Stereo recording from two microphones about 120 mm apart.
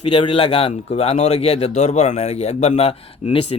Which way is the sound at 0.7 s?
60° left (ahead or behind).